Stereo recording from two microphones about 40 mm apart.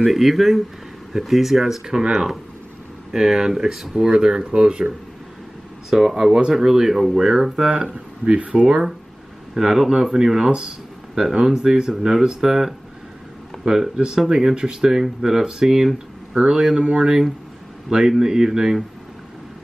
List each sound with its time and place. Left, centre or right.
0.0 s speech: centre
3.1 s speech: centre
5.9 s speech: centre
8.4 s speech: right
8.6 s speech: centre
18.2 s speech: centre